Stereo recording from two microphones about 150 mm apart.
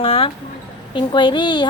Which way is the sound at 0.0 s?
40° left (ahead or behind).